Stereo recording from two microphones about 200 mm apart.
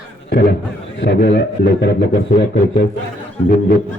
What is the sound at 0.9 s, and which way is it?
A man's voice, 60° left (ahead or behind).